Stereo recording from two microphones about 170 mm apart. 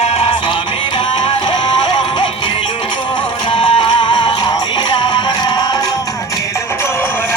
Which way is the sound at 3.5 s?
30° left (ahead or behind).